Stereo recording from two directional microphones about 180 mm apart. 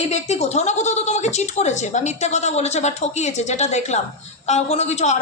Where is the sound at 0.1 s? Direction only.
35° left (ahead or behind).